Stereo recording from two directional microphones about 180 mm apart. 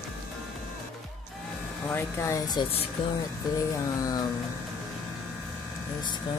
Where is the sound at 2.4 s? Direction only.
25° left (ahead or behind).